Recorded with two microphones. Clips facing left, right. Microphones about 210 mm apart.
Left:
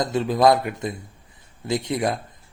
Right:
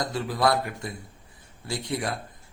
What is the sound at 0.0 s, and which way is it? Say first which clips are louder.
Speech: left 7 dB; 20° left (ahead or behind).